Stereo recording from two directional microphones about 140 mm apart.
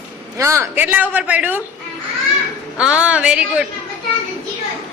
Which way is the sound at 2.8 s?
10° right (ahead or behind).